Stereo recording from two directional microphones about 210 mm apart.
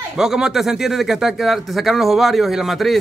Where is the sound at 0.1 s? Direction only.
5° right (ahead or behind).